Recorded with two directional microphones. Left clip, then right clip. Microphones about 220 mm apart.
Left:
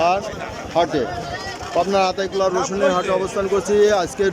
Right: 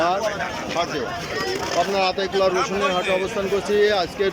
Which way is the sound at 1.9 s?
10° left (ahead or behind).